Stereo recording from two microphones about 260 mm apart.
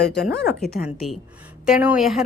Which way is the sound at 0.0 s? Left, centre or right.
Left.